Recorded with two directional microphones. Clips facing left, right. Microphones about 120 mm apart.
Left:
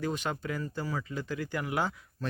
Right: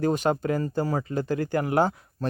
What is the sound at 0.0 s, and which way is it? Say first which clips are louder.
Speech: right 9 dB; 45° right (ahead or behind).